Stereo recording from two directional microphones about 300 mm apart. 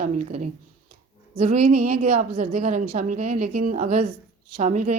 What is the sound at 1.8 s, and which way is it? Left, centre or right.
Speech, right.